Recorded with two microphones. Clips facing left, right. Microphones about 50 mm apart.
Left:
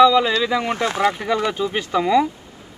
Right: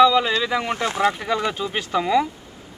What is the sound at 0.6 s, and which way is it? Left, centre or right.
Speech, left.